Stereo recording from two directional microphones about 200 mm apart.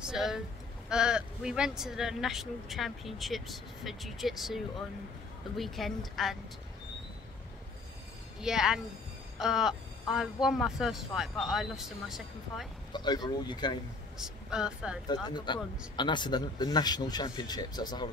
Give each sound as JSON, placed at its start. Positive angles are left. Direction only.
{"t": 0.0, "sound": "speech", "side_deg": -5}
{"t": 5.6, "sound": "speech", "side_deg": 0}
{"t": 8.4, "sound": "speech", "side_deg": -5}
{"t": 12.9, "sound": "speech", "side_deg": 20}
{"t": 14.1, "sound": "speech", "side_deg": -5}
{"t": 15.0, "sound": "speech", "side_deg": 20}